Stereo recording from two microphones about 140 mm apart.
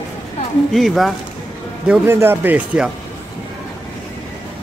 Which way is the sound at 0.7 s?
Centre (ahead or behind).